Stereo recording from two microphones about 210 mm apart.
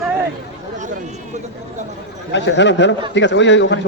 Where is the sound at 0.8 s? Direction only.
35° right (ahead or behind).